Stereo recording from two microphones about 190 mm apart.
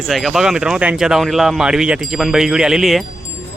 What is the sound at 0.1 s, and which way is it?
Speech, centre (ahead or behind).